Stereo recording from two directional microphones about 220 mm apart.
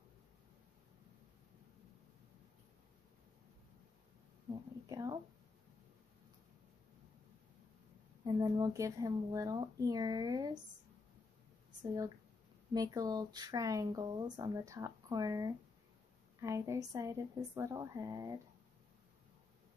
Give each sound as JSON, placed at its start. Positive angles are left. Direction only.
{"t": 4.8, "sound": "a sound", "side_deg": -15}
{"t": 8.2, "sound": "speech", "side_deg": -20}
{"t": 11.8, "sound": "speech", "side_deg": -15}